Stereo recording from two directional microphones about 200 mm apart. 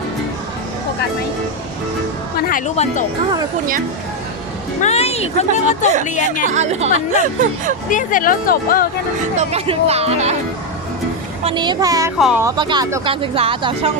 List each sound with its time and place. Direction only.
2.5 s speech: 40° left (ahead or behind)
4.8 s speech: 30° left (ahead or behind)
6.4 s speech: 35° right (ahead or behind)
7.9 s speech: 40° left (ahead or behind)
9.3 s speech: 35° right (ahead or behind)
11.4 s speech: 20° right (ahead or behind)
12.2 s speech: 5° right (ahead or behind)
12.5 s speech: 20° right (ahead or behind)